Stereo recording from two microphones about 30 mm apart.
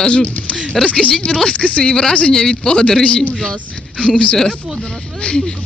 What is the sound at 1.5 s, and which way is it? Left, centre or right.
Speech, left.